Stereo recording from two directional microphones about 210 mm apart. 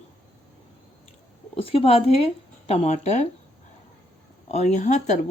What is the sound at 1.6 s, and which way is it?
Speech, 25° left (ahead or behind).